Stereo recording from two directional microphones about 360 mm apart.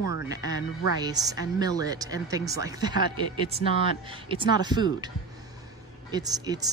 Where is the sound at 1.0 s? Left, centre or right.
Centre.